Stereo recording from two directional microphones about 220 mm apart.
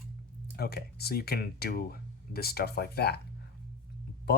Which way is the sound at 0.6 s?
45° left (ahead or behind).